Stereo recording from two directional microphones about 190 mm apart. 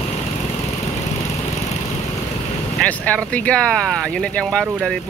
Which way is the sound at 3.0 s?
5° left (ahead or behind).